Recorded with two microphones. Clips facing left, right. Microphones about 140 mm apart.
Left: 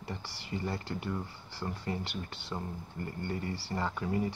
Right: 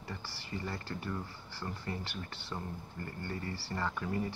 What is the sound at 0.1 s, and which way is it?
Speech, 20° left (ahead or behind).